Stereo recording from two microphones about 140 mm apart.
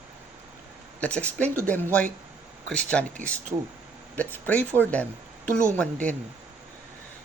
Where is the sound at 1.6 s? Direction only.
10° left (ahead or behind).